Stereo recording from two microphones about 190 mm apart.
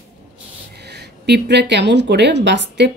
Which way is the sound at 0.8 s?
60° right (ahead or behind).